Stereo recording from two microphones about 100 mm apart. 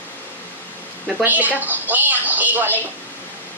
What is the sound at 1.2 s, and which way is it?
A woman's voice, 15° right (ahead or behind).